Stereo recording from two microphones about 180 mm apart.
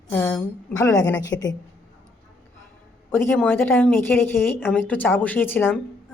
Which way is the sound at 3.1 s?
10° left (ahead or behind).